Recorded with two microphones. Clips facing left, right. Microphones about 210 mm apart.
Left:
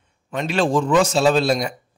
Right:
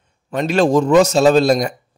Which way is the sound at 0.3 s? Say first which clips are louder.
Right 5 dB; 40° right (ahead or behind).